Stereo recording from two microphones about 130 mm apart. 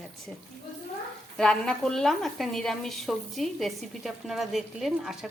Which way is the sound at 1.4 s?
5° left (ahead or behind).